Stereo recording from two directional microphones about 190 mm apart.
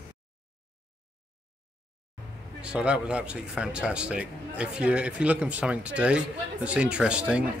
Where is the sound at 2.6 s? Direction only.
5° right (ahead or behind).